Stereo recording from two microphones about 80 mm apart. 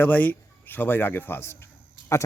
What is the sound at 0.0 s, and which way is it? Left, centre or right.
Speech, left.